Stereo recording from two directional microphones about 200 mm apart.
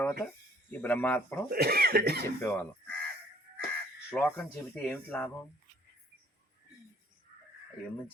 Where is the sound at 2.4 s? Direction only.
10° left (ahead or behind).